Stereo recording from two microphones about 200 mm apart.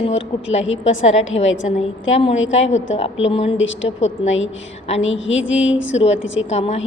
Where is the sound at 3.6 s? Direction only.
70° left (ahead or behind).